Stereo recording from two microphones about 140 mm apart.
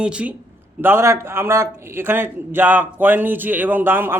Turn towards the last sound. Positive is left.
turn(degrees=-15)  # may be behind; listen again after turning